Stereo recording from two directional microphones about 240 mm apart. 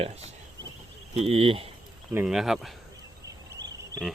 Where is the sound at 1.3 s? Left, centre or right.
Right.